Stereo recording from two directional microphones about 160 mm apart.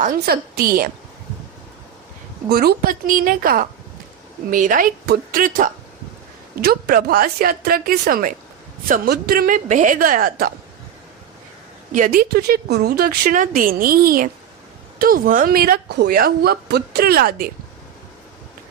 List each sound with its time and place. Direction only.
0.0 s a woman's voice: 70° right (ahead or behind)
2.5 s a woman's voice: 70° right (ahead or behind)
6.6 s a woman's voice: 70° right (ahead or behind)
11.9 s a woman's voice: 55° right (ahead or behind)